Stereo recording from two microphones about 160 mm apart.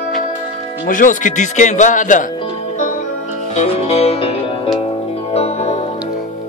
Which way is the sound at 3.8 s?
40° left (ahead or behind).